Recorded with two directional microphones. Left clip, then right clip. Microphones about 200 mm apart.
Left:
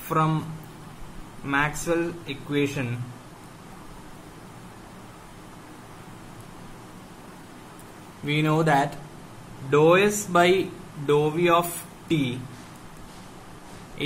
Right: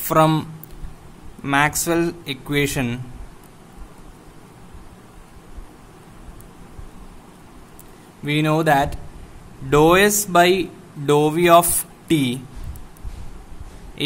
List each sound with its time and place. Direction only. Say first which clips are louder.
0.1 s speech: right 8 dB; 55° right (ahead or behind)
1.4 s speech: right 7 dB; 60° right (ahead or behind)
8.3 s speech: right 5 dB; 45° right (ahead or behind)
9.7 s speech: right 4 dB; 55° right (ahead or behind)